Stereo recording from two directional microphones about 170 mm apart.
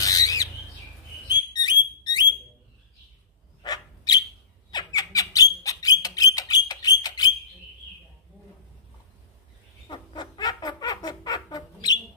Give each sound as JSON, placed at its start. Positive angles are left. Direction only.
{"t": 0.0, "sound": "squawk", "side_deg": 20}
{"t": 1.3, "sound": "bird", "side_deg": 25}
{"t": 3.6, "sound": "bird", "side_deg": 25}
{"t": 4.6, "sound": "squawk", "side_deg": 25}
{"t": 9.8, "sound": "a sound", "side_deg": 25}